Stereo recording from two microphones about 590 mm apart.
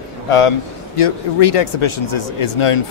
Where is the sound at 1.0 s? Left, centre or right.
Left.